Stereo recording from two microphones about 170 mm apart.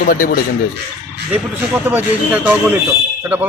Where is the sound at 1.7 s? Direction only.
10° right (ahead or behind).